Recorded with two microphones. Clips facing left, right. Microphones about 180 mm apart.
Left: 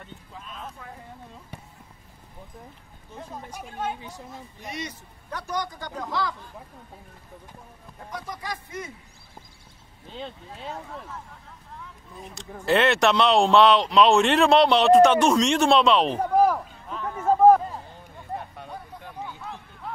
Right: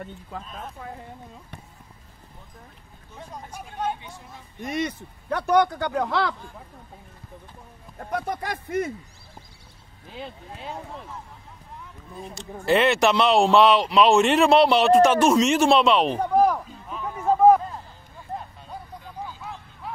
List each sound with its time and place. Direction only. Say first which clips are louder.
0.3 s a man's voice: right 8 dB; 60° right (ahead or behind)
1.5 s a sound: left 3 dB; 10° left (ahead or behind)
3.2 s speech: left 1 dB; centre (ahead or behind)
4.6 s a man's voice: right 9 dB; 50° right (ahead or behind)
8.1 s a man's voice: right 6 dB; 60° right (ahead or behind)
10.1 s speech: even; 10° right (ahead or behind)
12.6 s speech: right 1 dB; centre (ahead or behind)